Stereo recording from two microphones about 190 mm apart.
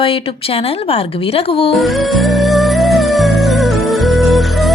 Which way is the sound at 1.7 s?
Centre (ahead or behind).